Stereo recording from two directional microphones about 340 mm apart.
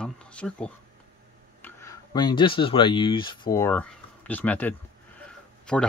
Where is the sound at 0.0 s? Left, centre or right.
Centre.